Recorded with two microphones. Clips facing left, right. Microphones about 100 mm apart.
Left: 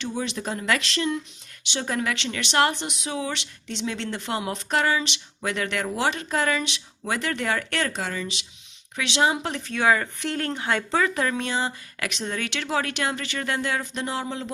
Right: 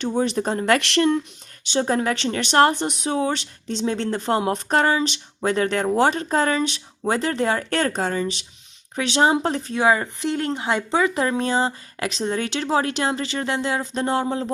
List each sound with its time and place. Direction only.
0.0 s speech: 45° right (ahead or behind)
1.7 s speech: 35° right (ahead or behind)